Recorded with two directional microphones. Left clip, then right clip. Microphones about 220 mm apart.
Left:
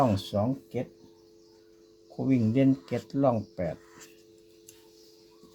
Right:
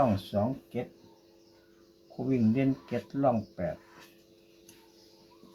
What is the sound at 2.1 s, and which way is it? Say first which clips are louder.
Speech: left 3 dB; 50° left (ahead or behind).